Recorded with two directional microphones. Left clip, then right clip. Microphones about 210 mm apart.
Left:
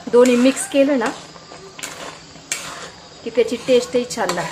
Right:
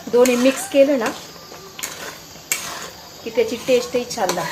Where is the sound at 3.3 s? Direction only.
10° left (ahead or behind).